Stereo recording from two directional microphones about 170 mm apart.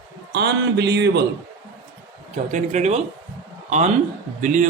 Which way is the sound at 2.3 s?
45° right (ahead or behind).